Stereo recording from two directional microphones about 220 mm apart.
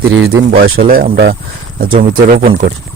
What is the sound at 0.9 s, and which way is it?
Speech, 40° right (ahead or behind).